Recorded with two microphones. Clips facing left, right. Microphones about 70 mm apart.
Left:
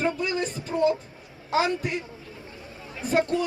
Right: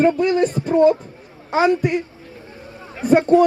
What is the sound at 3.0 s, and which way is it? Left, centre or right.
Speech, right.